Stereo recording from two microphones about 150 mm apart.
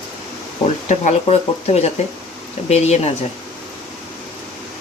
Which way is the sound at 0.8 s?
45° left (ahead or behind).